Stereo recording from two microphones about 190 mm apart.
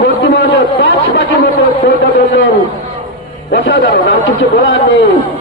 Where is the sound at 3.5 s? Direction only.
65° left (ahead or behind).